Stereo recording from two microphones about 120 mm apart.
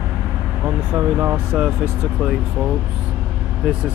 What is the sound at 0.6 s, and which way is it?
Speech, 15° right (ahead or behind).